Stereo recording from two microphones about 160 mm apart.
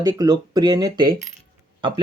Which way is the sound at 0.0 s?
25° right (ahead or behind).